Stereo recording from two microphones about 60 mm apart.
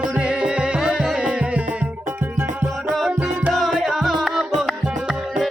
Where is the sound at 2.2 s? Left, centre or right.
Right.